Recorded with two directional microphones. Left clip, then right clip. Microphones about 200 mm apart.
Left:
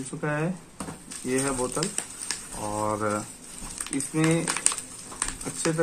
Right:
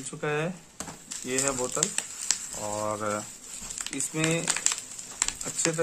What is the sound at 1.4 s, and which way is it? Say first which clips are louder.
Speech: right 2 dB; 10° right (ahead or behind).